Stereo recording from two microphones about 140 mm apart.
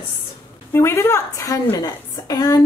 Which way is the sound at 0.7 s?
20° left (ahead or behind).